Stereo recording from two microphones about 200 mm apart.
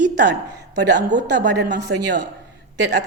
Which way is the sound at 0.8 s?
60° right (ahead or behind).